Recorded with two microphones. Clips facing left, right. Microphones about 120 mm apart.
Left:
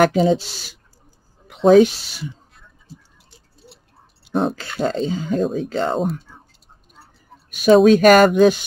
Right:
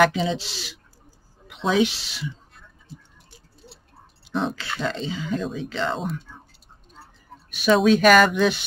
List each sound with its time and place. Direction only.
0.0 s speech: 45° left (ahead or behind)
3.6 s a sound: centre (ahead or behind)
4.3 s speech: 45° left (ahead or behind)
7.5 s speech: 45° left (ahead or behind)